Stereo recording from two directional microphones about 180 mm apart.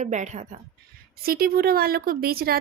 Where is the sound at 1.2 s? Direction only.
55° right (ahead or behind).